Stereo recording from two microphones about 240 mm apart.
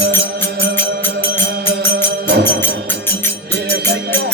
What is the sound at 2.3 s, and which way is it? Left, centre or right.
Music, right.